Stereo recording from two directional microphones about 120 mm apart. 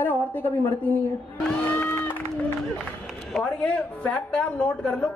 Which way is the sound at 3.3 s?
10° left (ahead or behind).